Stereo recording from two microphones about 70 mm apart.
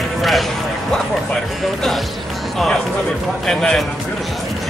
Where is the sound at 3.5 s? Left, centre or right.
Centre.